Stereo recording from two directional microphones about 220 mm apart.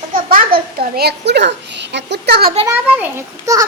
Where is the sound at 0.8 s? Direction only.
45° right (ahead or behind).